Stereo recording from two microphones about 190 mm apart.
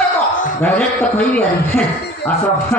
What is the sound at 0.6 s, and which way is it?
A man's voice, 10° left (ahead or behind).